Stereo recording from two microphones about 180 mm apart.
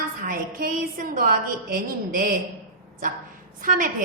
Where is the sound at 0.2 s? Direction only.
50° right (ahead or behind).